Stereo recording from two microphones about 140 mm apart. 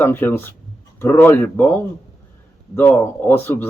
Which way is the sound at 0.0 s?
15° left (ahead or behind).